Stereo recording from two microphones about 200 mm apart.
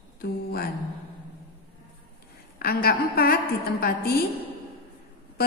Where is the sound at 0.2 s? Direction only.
50° left (ahead or behind).